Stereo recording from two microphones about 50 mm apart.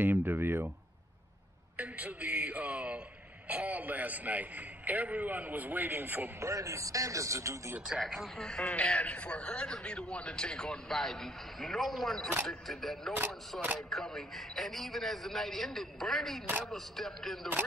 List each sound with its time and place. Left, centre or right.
0.0 s a sound: right
1.8 s a man's voice: right
6.4 s a man's voice: right
8.0 s a man's voice: centre
8.6 s a man's voice: left; by 17.5 s centre